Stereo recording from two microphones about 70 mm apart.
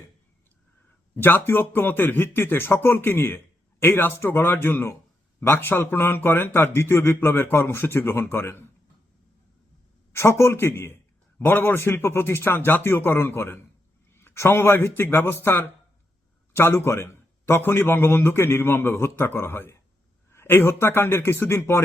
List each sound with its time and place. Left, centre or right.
1.1 s speech: left
10.1 s speech: left